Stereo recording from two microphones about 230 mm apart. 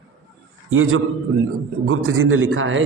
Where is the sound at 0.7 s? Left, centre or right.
Right.